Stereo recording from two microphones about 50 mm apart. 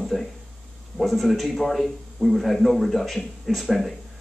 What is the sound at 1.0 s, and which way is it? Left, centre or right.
A man's voice, centre.